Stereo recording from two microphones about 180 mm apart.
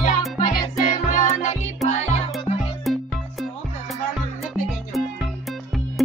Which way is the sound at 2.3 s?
Centre (ahead or behind).